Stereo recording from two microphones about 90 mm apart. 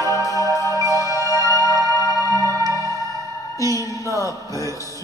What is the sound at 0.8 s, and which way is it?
Music, 35° right (ahead or behind).